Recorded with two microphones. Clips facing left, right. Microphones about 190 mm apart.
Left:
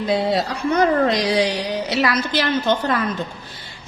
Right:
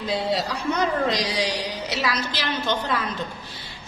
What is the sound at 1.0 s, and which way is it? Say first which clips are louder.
A woman's voice: left 6 dB; 55° left (ahead or behind).